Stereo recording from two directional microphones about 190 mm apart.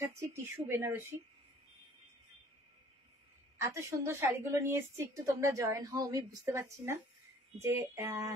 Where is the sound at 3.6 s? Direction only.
15° right (ahead or behind).